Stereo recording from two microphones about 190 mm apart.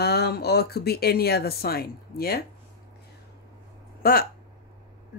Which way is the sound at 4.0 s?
55° left (ahead or behind).